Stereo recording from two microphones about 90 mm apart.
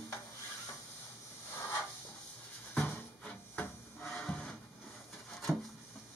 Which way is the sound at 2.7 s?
15° left (ahead or behind).